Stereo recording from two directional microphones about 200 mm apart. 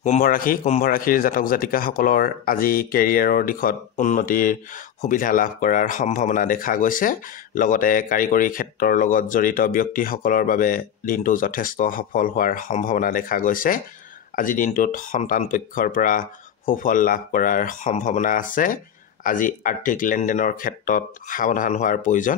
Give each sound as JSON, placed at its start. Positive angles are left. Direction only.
{"t": 0.0, "sound": "speech", "side_deg": 40}